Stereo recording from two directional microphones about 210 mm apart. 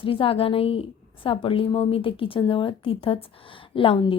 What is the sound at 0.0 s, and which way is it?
A woman's voice, 25° left (ahead or behind).